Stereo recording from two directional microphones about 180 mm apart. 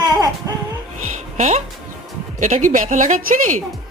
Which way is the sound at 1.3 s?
40° right (ahead or behind).